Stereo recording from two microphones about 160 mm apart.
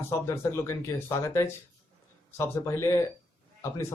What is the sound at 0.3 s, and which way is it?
Speech, 15° left (ahead or behind).